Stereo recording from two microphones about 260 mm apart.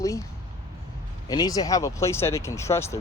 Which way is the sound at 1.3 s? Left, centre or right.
Centre.